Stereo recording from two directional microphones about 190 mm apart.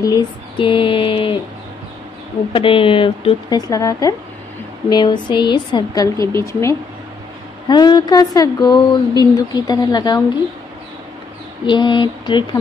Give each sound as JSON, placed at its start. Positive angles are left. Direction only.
{"t": 0.0, "sound": "a sound", "side_deg": 20}
{"t": 2.5, "sound": "speech", "side_deg": 25}
{"t": 11.6, "sound": "speech", "side_deg": 25}